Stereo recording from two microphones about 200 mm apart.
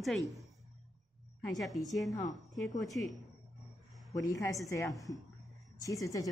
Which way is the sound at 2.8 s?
Centre (ahead or behind).